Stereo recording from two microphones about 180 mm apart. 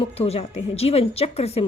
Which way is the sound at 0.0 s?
35° left (ahead or behind).